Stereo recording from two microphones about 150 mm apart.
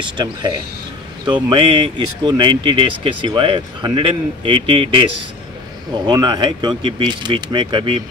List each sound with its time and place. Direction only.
1.2 s speech: 35° right (ahead or behind)
6.0 s speech: 25° right (ahead or behind)